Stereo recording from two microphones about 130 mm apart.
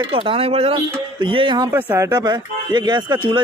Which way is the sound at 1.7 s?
15° right (ahead or behind).